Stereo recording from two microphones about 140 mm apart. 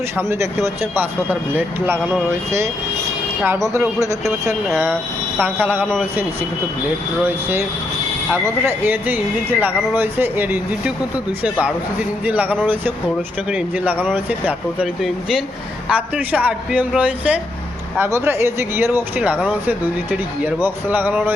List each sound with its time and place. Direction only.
0.2 s speech: 20° right (ahead or behind)
3.7 s speech: 20° right (ahead or behind)
5.4 s speech: 15° right (ahead or behind)
8.3 s speech: 15° right (ahead or behind)